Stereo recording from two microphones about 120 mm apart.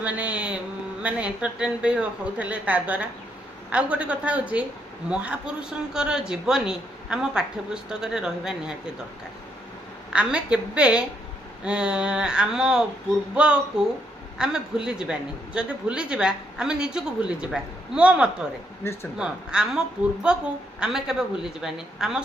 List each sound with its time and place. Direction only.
0.0 s a man's voice: 10° right (ahead or behind)
10.1 s a man's voice: 10° right (ahead or behind)
18.8 s speech: 20° left (ahead or behind)
19.1 s a man's voice: 5° right (ahead or behind)